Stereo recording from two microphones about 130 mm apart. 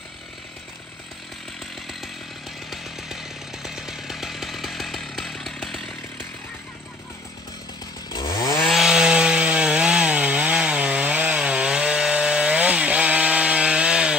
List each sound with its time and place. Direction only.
2.7 s chainsaw: centre (ahead or behind)
8.1 s chainsaw: 35° left (ahead or behind)
8.5 s wood: centre (ahead or behind)